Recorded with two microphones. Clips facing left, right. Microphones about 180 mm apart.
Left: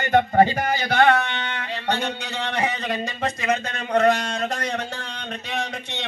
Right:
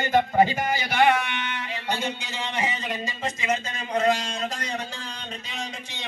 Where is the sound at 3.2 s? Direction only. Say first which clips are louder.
Left 3 dB; 65° left (ahead or behind).